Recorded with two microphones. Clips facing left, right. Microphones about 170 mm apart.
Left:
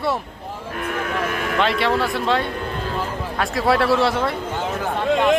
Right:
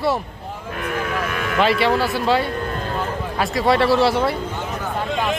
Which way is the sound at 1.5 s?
Centre (ahead or behind).